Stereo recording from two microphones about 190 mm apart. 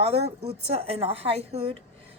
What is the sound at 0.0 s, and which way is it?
A woman's voice, 30° right (ahead or behind).